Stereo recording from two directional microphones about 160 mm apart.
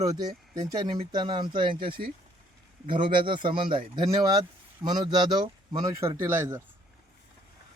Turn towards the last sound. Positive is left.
turn(degrees=-15)  # may be behind; listen again after turning